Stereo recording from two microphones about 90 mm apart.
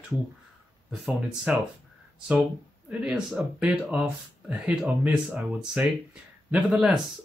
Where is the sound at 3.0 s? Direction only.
5° right (ahead or behind).